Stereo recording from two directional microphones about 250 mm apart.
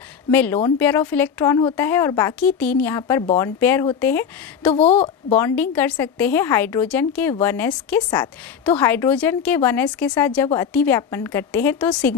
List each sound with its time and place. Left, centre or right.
0.3 s a woman's voice: centre
4.7 s a woman's voice: left
5.6 s a woman's voice: centre